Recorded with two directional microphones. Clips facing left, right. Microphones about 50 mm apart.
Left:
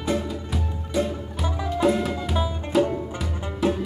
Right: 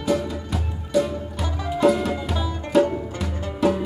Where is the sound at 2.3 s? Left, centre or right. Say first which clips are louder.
Left 2 dB; centre.